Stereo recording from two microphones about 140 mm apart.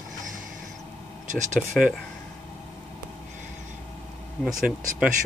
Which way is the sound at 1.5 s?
5° right (ahead or behind).